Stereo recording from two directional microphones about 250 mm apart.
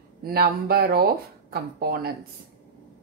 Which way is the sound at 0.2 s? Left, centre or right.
Right.